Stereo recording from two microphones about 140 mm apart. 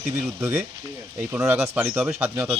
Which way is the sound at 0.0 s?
15° right (ahead or behind).